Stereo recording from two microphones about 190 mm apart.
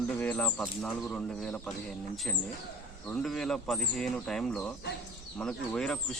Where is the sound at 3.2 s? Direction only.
Centre (ahead or behind).